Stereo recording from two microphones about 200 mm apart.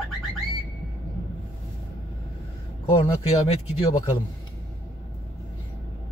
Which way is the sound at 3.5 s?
25° left (ahead or behind).